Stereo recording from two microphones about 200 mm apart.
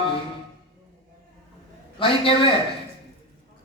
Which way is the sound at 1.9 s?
25° left (ahead or behind).